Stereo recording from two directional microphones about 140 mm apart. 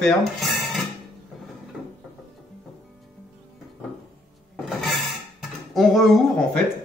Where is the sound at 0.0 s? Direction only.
Centre (ahead or behind).